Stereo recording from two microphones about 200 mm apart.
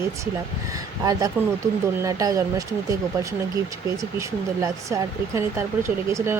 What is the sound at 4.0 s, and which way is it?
Speech, 15° right (ahead or behind).